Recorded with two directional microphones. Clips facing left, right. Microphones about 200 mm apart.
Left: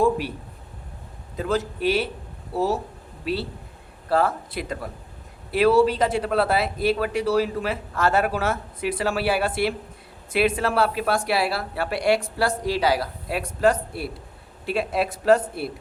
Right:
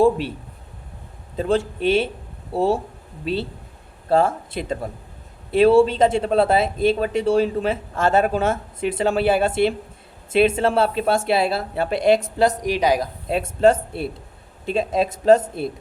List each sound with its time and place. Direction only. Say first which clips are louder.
0.0 s speech: right 4 dB; 25° right (ahead or behind)
1.4 s speech: right 4 dB; 30° right (ahead or behind)
4.1 s speech: right 4 dB; 25° right (ahead or behind)